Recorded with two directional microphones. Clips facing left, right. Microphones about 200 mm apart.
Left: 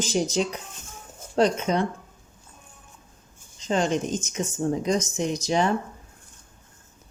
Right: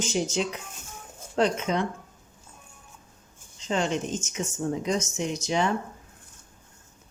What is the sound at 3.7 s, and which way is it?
Speech, 40° left (ahead or behind).